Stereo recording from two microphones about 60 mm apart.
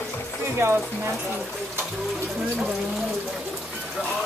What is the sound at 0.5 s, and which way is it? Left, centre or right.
Speech, right.